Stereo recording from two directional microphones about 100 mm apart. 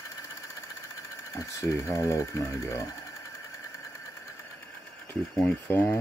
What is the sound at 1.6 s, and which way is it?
Speech, 30° left (ahead or behind).